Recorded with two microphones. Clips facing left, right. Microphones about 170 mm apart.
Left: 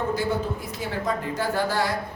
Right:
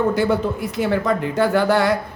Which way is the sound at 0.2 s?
70° right (ahead or behind).